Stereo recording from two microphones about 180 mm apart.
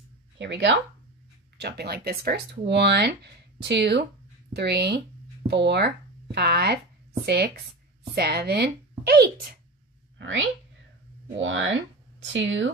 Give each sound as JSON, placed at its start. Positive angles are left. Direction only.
{"t": 0.4, "sound": "speech", "side_deg": -80}
{"t": 1.6, "sound": "a woman's voice", "side_deg": -65}
{"t": 10.1, "sound": "a sound", "side_deg": -90}
{"t": 11.3, "sound": "speech", "side_deg": -90}